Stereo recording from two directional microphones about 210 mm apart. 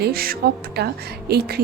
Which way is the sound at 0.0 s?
45° right (ahead or behind).